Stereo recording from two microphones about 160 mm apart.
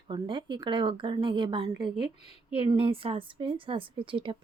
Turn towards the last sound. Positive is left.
turn(degrees=-35)  # may be behind; listen again after turning